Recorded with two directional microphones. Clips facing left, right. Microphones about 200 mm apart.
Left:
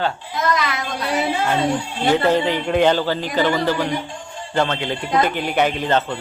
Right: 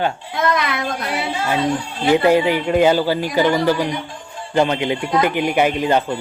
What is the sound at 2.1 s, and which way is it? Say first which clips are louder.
A man's voice: right 4 dB; 10° right (ahead or behind).